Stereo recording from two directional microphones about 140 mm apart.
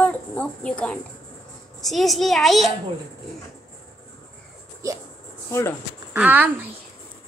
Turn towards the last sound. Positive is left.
turn(degrees=-10)  # may be behind; listen again after turning